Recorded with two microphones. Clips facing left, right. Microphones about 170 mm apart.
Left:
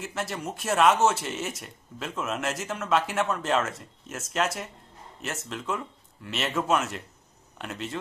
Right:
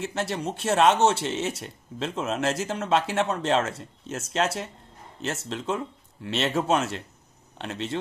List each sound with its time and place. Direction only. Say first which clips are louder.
0.0 s speech: right 4 dB; 30° right (ahead or behind)